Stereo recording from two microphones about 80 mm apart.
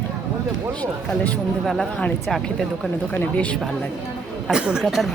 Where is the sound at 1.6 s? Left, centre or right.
Centre.